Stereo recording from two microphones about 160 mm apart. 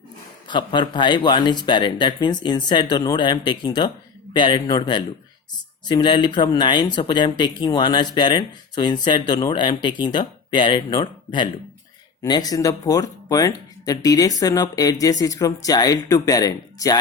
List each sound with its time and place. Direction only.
0.4 s speech: 30° left (ahead or behind)